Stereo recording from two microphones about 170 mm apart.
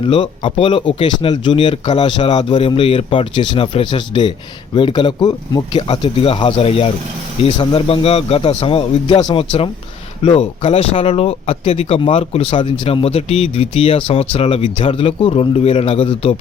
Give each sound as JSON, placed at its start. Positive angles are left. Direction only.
{"t": 0.0, "sound": "speech", "side_deg": 30}